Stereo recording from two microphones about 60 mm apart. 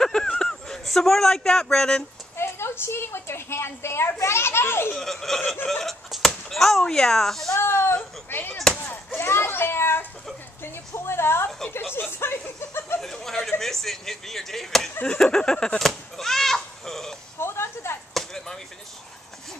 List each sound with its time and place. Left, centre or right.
0.0 s a sound: centre
2.3 s a woman's voice: left
4.9 s speech: centre
6.0 s chop: centre
6.8 s speech: centre
7.5 s a child's voice: left
13.0 s speech: centre
15.8 s sheep: centre
17.4 s a sound: left
18.1 s chop: centre